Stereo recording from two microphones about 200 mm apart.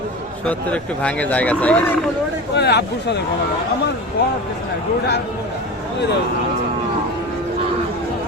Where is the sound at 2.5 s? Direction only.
55° left (ahead or behind).